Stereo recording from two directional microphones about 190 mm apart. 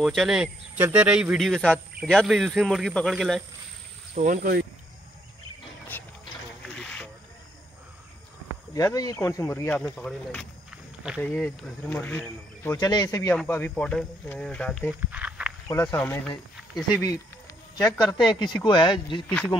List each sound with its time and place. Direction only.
0.0 s speech: centre (ahead or behind)
4.1 s speech: 40° right (ahead or behind)
5.9 s a sound: 10° left (ahead or behind)
8.7 s speech: 20° left (ahead or behind)
12.7 s speech: 20° left (ahead or behind)
13.3 s speech: 10° left (ahead or behind)
15.0 s a sound: 5° right (ahead or behind)
15.7 s speech: 15° left (ahead or behind)
17.9 s speech: 25° left (ahead or behind)